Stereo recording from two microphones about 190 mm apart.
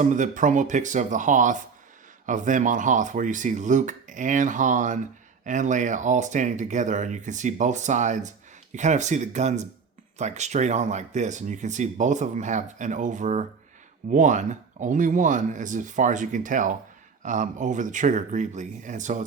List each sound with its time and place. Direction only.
0.0 s speech: 40° right (ahead or behind)